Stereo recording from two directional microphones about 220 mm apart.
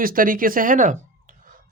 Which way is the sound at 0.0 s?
40° right (ahead or behind).